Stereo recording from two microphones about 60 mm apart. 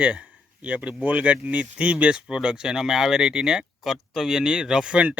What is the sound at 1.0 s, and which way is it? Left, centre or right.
Speech, right.